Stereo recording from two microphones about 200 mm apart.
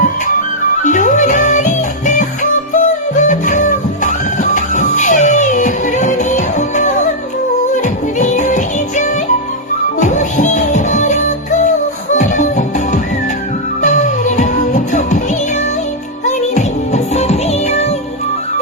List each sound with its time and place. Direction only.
0.9 s music: 40° left (ahead or behind)
16.2 s music: 35° left (ahead or behind)